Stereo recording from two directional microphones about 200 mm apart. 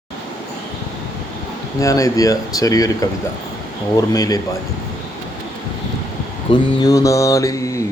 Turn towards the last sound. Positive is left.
turn(degrees=15)  # may be behind; listen again after turning